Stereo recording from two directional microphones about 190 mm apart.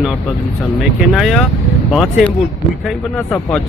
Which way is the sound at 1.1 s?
Centre (ahead or behind).